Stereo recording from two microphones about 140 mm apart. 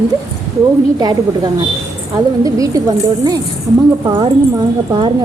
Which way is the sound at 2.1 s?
25° right (ahead or behind).